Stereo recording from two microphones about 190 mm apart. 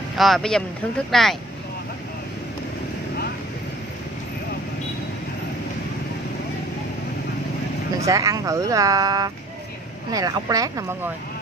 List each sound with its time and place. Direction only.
0.2 s speech: centre (ahead or behind)
8.0 s speech: 15° right (ahead or behind)